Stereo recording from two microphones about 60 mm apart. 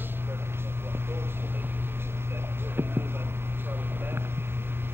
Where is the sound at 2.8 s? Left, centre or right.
Right.